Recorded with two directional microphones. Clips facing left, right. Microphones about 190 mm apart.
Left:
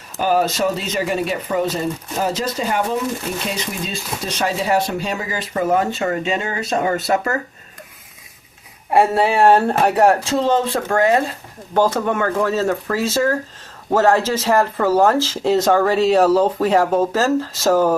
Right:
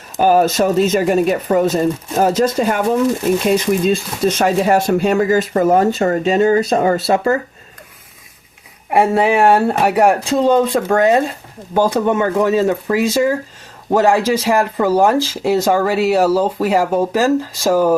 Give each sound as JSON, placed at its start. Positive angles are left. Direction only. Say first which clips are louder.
{"t": 0.2, "sound": "speech", "louder": "right 5 dB", "side_deg": -50}
{"t": 8.9, "sound": "speech", "louder": "right 2 dB", "side_deg": -15}